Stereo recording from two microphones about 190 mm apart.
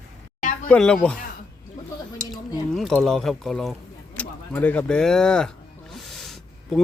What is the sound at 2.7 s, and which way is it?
Speech, centre (ahead or behind).